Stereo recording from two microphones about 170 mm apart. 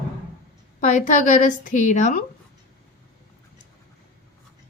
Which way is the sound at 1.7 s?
45° left (ahead or behind).